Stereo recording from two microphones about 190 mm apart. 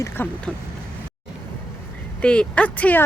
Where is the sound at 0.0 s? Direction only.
10° left (ahead or behind).